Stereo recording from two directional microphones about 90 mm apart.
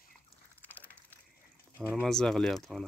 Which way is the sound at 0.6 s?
20° left (ahead or behind).